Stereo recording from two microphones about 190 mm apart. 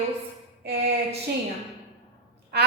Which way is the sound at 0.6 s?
60° right (ahead or behind).